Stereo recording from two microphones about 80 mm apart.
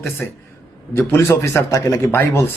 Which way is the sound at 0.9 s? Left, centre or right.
Left.